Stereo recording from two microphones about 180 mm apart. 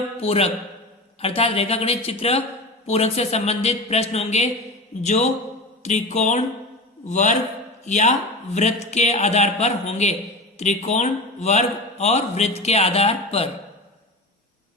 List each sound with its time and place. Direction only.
0.2 s a man's voice: 35° left (ahead or behind)